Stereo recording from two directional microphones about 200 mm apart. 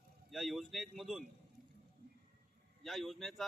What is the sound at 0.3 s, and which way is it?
Speech, centre (ahead or behind).